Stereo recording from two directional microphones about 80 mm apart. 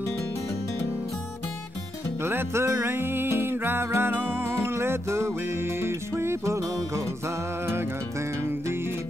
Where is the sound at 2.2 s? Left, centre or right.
Right.